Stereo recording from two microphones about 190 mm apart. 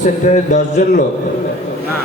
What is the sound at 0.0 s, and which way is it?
A man's voice, 40° left (ahead or behind).